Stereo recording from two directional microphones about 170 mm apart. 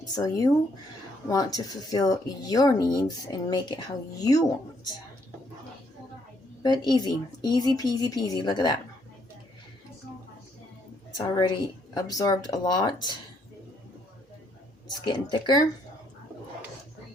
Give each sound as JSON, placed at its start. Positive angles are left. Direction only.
{"t": 0.2, "sound": "a woman's voice", "side_deg": 20}
{"t": 6.6, "sound": "speech", "side_deg": 25}
{"t": 11.2, "sound": "speech", "side_deg": 25}
{"t": 14.8, "sound": "speech", "side_deg": 25}